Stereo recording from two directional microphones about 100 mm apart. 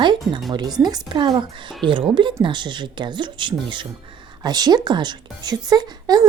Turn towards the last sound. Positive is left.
turn(degrees=-40)  # may be behind; listen again after turning